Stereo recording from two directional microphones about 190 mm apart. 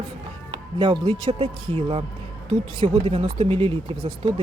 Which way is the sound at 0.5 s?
25° right (ahead or behind).